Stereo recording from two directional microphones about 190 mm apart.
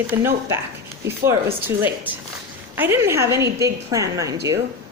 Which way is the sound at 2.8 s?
15° right (ahead or behind).